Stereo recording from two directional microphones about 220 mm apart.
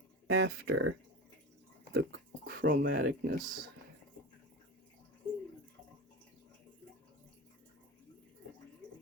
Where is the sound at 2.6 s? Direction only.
40° right (ahead or behind).